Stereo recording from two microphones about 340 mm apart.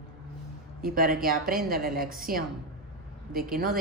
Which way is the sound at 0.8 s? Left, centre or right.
Right.